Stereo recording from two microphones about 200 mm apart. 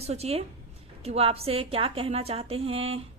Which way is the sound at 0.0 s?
30° right (ahead or behind).